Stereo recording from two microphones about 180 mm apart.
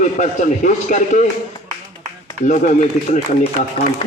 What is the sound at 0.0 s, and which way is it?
A man's voice, 45° left (ahead or behind).